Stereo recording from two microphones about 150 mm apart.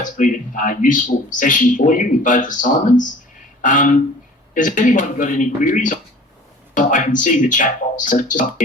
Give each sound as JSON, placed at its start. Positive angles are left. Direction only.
{"t": 0.0, "sound": "speech", "side_deg": 60}